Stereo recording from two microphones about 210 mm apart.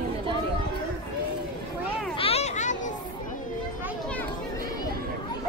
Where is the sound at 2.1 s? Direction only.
30° left (ahead or behind).